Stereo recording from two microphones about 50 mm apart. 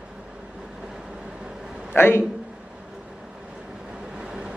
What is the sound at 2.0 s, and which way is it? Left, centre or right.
Speech, left.